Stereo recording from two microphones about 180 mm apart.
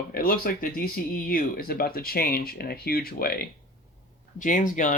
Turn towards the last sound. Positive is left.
turn(degrees=45)  # may be behind; listen again after turning